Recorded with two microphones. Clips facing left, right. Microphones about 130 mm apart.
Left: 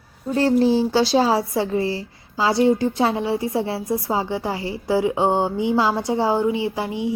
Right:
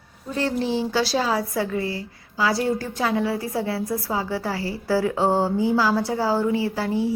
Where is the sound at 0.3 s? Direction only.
35° left (ahead or behind).